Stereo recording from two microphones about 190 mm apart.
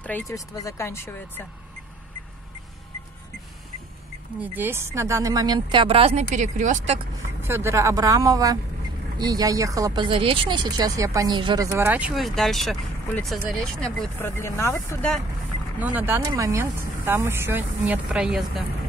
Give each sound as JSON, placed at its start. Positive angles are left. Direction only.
{"t": 0.0, "sound": "speech", "side_deg": 15}
{"t": 4.4, "sound": "a woman's voice", "side_deg": -10}
{"t": 7.4, "sound": "a woman's voice", "side_deg": -15}
{"t": 15.8, "sound": "speech", "side_deg": -10}